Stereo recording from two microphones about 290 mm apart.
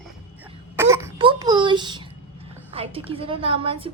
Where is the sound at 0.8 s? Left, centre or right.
Centre.